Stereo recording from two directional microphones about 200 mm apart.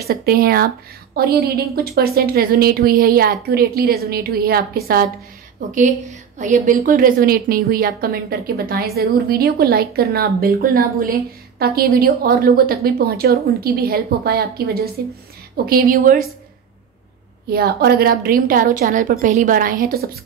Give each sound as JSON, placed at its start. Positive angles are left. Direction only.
{"t": 0.0, "sound": "a woman's voice", "side_deg": -50}
{"t": 17.5, "sound": "a woman's voice", "side_deg": -50}